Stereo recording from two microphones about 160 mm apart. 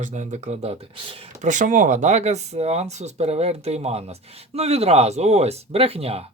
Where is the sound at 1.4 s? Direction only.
50° right (ahead or behind).